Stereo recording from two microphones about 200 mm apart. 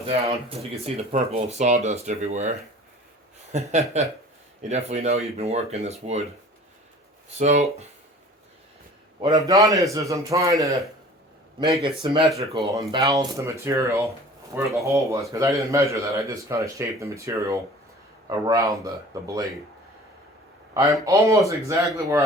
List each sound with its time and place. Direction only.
0.0 s speech: 30° right (ahead or behind)
7.3 s speech: 35° right (ahead or behind)
9.2 s a man's voice: 15° right (ahead or behind)
20.7 s a man's voice: 15° right (ahead or behind)